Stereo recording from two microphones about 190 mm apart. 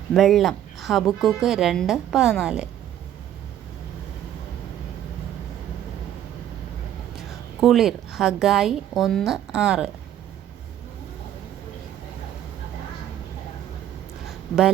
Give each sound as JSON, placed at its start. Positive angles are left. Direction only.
{"t": 0.1, "sound": "a woman's voice", "side_deg": 0}
{"t": 7.2, "sound": "a woman's voice", "side_deg": 0}
{"t": 14.3, "sound": "a sound", "side_deg": -5}